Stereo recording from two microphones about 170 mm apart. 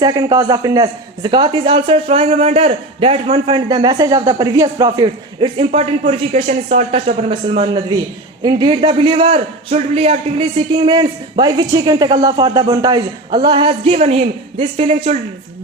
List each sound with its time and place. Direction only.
0.0 s a man's voice: 20° right (ahead or behind)